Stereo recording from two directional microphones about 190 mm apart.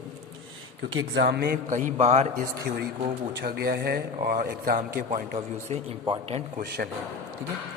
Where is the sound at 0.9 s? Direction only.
65° right (ahead or behind); by 2.5 s 35° right (ahead or behind).